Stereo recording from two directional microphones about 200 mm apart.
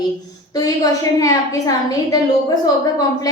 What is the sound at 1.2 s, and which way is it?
Speech, 15° left (ahead or behind).